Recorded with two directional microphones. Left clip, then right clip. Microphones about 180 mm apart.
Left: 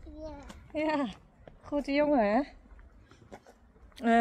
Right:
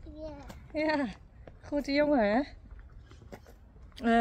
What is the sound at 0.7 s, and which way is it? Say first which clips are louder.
Speech: right 1 dB; 15° left (ahead or behind).